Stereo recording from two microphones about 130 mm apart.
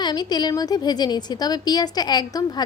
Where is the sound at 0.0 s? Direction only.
35° left (ahead or behind).